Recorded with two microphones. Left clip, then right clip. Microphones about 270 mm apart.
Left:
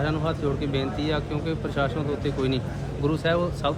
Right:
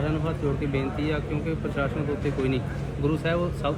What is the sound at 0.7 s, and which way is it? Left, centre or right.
Speech, left.